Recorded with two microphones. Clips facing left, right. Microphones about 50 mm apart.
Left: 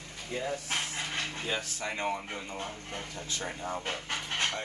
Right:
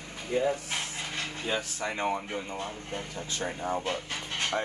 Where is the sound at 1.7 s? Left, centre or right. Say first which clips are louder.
Right 3 dB; centre.